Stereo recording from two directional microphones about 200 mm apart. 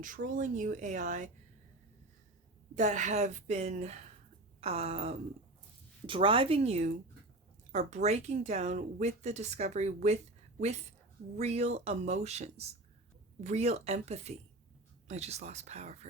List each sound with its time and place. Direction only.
0.0 s speech: 40° right (ahead or behind)
2.7 s speech: 40° right (ahead or behind)
11.3 s speech: 35° right (ahead or behind)